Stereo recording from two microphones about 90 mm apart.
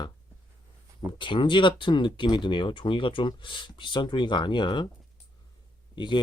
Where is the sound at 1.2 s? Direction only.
65° left (ahead or behind).